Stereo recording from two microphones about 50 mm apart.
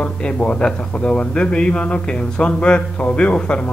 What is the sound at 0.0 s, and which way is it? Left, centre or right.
Speech, left.